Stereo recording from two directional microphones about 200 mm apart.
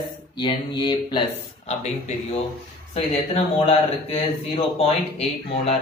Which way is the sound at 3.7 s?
35° left (ahead or behind).